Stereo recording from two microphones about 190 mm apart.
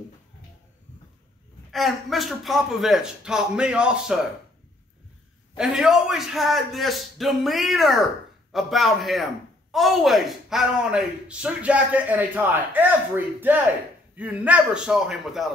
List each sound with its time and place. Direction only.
1.7 s speech: centre (ahead or behind)
5.6 s speech: 5° right (ahead or behind)